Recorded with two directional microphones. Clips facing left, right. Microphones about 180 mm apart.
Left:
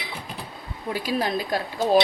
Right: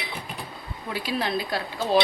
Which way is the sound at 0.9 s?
45° left (ahead or behind).